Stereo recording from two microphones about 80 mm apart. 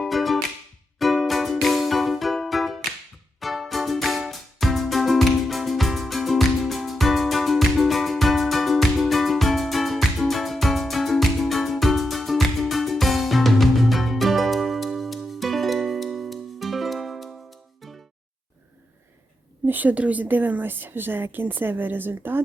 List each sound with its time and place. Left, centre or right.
0.0 s music: centre
19.6 s a woman's voice: right